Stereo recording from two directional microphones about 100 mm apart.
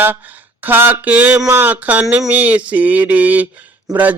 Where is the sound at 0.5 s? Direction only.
20° right (ahead or behind).